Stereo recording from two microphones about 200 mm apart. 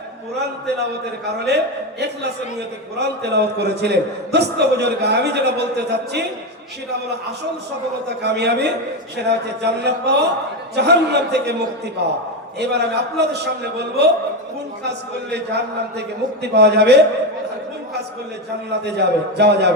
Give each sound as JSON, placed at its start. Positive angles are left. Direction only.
{"t": 1.5, "sound": "a man's voice", "side_deg": -55}
{"t": 3.0, "sound": "a man's voice", "side_deg": -55}
{"t": 8.2, "sound": "a man's voice", "side_deg": -55}
{"t": 18.9, "sound": "a man's voice", "side_deg": -55}